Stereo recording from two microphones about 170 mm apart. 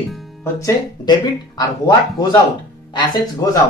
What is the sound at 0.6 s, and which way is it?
Speech, 20° left (ahead or behind).